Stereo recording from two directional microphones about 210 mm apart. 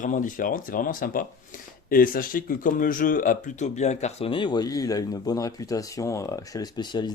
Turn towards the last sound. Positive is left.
turn(degrees=20)  # may be behind; listen again after turning